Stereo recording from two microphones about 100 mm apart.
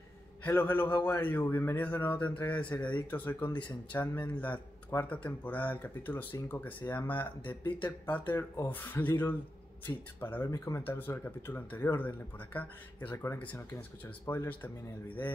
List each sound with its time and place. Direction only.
0.4 s a man's voice: 20° left (ahead or behind)
14.5 s speech: 15° left (ahead or behind)